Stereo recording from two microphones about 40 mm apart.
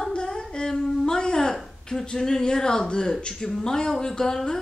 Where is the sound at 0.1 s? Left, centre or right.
Left.